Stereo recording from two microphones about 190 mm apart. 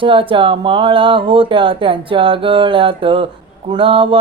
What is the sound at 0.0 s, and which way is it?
Mantra, 25° right (ahead or behind).